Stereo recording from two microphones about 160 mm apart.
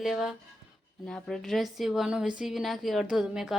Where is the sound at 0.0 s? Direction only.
Centre (ahead or behind).